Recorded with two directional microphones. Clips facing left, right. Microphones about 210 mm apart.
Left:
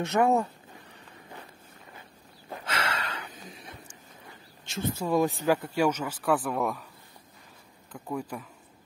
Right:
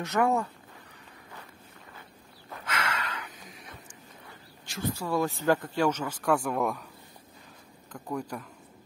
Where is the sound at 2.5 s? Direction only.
30° left (ahead or behind).